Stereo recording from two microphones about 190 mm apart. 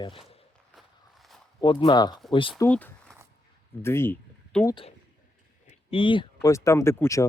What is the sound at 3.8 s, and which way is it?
Speech, 15° left (ahead or behind).